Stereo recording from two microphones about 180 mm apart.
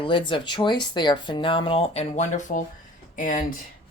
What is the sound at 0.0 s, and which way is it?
Speech, 25° left (ahead or behind).